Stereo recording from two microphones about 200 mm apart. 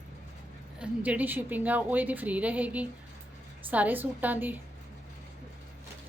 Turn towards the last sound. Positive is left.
turn(degrees=-10)  # may be behind; listen again after turning